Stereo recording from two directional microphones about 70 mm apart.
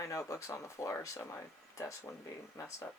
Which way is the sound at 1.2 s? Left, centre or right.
Left.